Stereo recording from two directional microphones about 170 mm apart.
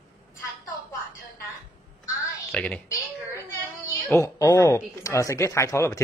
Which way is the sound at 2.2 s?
10° left (ahead or behind).